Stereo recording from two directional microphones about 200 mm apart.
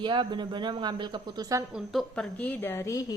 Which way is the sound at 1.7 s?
Centre (ahead or behind).